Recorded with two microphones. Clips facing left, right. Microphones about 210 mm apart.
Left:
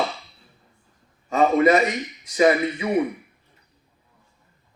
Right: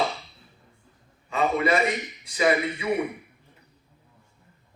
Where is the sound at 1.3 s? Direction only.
45° left (ahead or behind).